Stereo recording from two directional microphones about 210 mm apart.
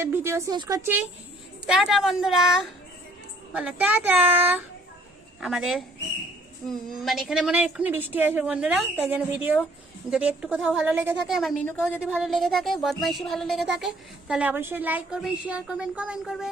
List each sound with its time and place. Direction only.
0.0 s a child's voice: 10° right (ahead or behind)